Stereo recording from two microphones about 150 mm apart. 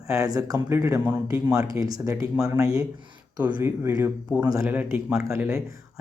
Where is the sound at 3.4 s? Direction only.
10° right (ahead or behind).